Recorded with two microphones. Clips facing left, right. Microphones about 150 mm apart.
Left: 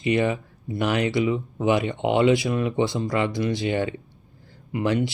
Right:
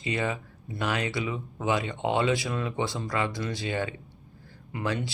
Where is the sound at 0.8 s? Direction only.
20° left (ahead or behind).